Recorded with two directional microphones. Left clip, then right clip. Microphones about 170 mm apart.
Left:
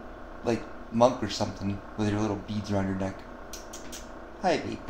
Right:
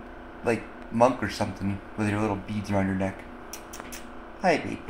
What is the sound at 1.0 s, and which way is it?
Speech, 40° right (ahead or behind).